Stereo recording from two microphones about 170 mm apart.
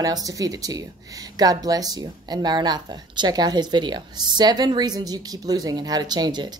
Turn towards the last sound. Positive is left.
turn(degrees=-25)  # may be behind; listen again after turning